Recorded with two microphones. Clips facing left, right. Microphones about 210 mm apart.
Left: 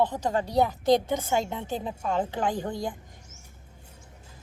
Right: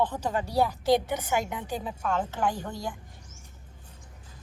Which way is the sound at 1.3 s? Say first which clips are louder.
Right 1 dB; 25° left (ahead or behind).